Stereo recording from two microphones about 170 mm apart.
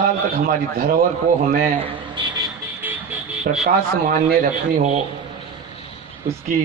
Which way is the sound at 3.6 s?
65° right (ahead or behind).